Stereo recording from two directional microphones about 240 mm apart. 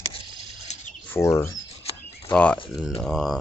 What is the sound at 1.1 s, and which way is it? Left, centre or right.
Speech, centre.